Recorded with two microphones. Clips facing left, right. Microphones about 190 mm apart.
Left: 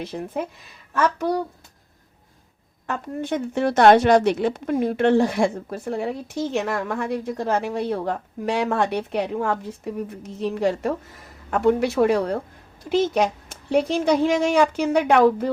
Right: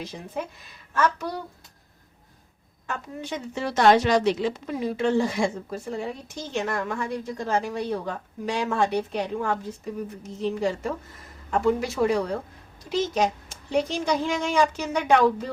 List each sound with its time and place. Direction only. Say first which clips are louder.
0.0 s a woman's voice: left 5 dB; 55° left (ahead or behind)
3.2 s a woman's voice: left 9 dB; 55° left (ahead or behind)